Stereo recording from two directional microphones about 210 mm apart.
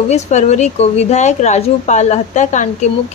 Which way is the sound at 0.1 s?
35° left (ahead or behind).